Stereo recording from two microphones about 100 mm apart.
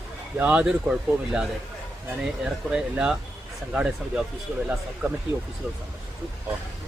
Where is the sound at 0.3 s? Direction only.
15° right (ahead or behind).